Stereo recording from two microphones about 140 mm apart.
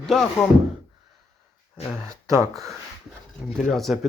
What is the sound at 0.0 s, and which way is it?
Speech, 5° left (ahead or behind).